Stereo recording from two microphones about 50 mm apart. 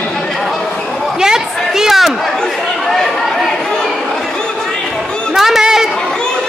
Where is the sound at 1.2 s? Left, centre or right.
Centre.